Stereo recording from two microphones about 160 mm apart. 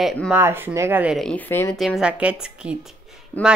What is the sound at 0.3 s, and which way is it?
Speech, 15° right (ahead or behind).